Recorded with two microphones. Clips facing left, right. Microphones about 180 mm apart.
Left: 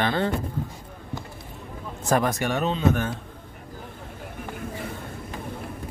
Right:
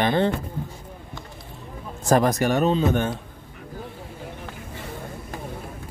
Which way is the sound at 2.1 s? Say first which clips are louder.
Right 4 dB; 40° right (ahead or behind).